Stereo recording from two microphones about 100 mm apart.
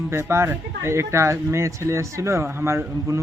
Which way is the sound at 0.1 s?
25° right (ahead or behind).